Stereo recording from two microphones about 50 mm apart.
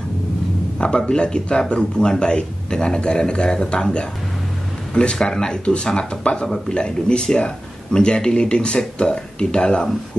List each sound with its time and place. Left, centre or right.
0.7 s speech: centre